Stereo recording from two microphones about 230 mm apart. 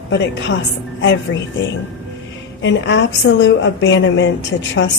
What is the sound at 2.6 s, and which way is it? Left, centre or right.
A woman's voice, left.